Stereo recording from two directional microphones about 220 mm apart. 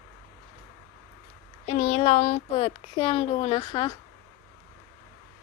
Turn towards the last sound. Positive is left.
turn(degrees=20)  # may be behind; listen again after turning